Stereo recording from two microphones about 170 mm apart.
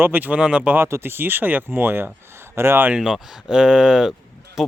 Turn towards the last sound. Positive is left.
turn(degrees=0)  # may be behind; listen again after turning